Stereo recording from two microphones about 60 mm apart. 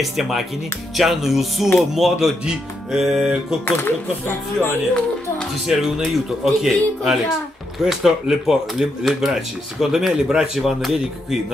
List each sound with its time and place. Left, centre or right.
0.0 s speech: centre
3.6 s speech: left
5.7 s speech: centre